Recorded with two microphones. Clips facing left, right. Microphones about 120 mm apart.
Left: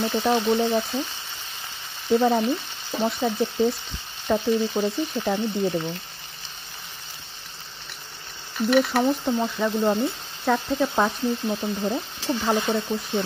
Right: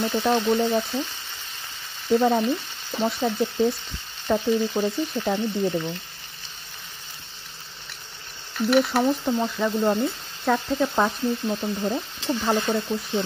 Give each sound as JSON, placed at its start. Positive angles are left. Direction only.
{"t": 0.0, "sound": "frying", "side_deg": 10}
{"t": 2.0, "sound": "frying", "side_deg": 0}
{"t": 8.6, "sound": "frying", "side_deg": -5}
{"t": 12.4, "sound": "speech", "side_deg": 15}
{"t": 12.7, "sound": "frying", "side_deg": 0}